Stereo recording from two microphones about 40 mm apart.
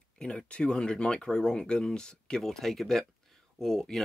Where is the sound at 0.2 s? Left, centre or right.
Left.